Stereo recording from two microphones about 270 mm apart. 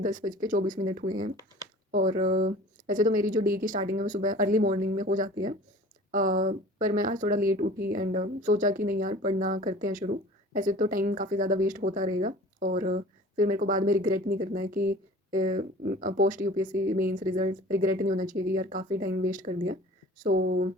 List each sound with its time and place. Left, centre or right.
0.0 s speech: right